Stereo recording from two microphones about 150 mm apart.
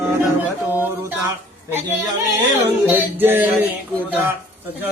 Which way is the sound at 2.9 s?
15° right (ahead or behind).